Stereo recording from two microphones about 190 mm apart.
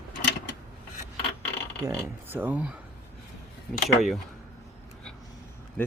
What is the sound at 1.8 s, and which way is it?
Speech, 15° right (ahead or behind).